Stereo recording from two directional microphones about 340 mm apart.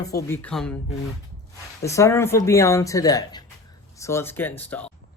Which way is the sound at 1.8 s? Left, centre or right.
Centre.